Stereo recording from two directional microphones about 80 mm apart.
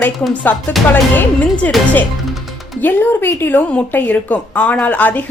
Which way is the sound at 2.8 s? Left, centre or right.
Left.